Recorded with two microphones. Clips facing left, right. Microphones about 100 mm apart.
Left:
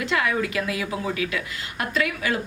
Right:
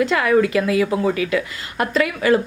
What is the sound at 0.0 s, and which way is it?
A woman's voice, 40° right (ahead or behind).